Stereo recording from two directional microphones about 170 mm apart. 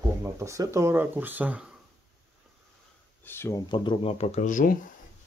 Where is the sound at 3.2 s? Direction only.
15° left (ahead or behind); by 4.8 s 50° left (ahead or behind).